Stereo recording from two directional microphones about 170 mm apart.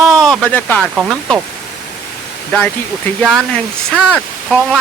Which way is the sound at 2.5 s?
5° left (ahead or behind).